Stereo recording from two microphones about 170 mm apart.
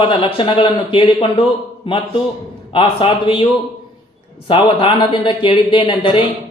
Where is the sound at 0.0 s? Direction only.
30° left (ahead or behind).